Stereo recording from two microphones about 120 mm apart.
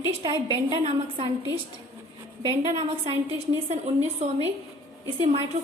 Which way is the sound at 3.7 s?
65° right (ahead or behind).